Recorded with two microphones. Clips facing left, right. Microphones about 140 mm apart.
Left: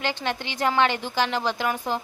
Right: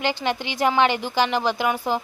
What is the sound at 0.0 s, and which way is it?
A woman's voice, 15° right (ahead or behind).